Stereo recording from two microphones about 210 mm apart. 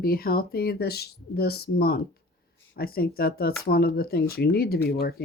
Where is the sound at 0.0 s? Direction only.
45° left (ahead or behind).